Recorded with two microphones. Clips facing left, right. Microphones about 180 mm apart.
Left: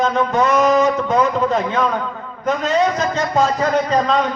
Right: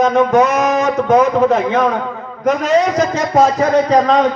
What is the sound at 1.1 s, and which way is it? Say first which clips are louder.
Speech: right 5 dB; 80° right.